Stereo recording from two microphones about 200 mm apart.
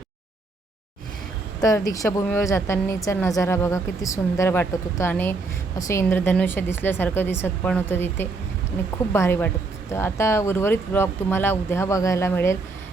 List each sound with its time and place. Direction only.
1.6 s a woman's voice: 15° left (ahead or behind)